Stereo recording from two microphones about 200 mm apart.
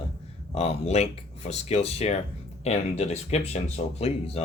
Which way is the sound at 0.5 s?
35° left (ahead or behind).